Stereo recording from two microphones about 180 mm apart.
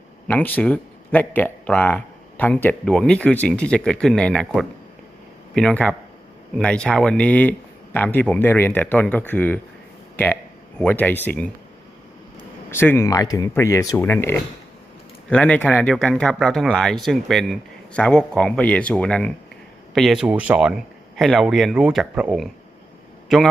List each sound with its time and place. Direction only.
0.3 s speech: 10° left (ahead or behind)
10.8 s speech: 10° left (ahead or behind)
12.7 s speech: 10° left (ahead or behind)